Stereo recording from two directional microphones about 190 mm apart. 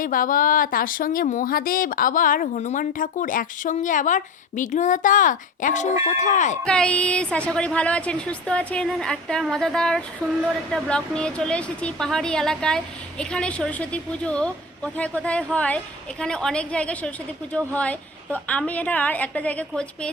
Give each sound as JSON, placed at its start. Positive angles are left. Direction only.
{"t": 0.0, "sound": "a woman's voice", "side_deg": 45}
{"t": 6.7, "sound": "a woman's voice", "side_deg": 5}